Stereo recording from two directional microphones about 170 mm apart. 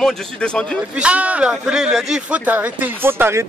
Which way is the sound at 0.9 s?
5° right (ahead or behind).